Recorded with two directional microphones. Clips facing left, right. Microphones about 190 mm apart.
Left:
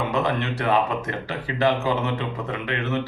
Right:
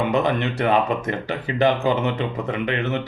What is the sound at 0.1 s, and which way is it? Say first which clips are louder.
A man's voice: right 3 dB; 15° right (ahead or behind).